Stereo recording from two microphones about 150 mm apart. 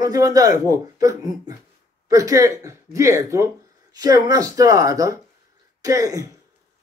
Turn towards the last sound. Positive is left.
turn(degrees=-20)  # may be behind; listen again after turning